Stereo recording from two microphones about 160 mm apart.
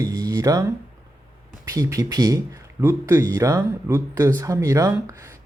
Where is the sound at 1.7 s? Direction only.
20° right (ahead or behind).